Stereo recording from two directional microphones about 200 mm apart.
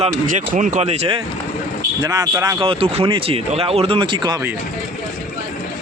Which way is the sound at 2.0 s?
15° right (ahead or behind).